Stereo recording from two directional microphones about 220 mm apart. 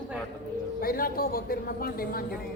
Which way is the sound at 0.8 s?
40° left (ahead or behind).